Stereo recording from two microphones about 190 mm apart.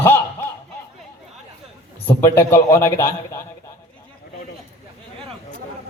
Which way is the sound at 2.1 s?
10° left (ahead or behind).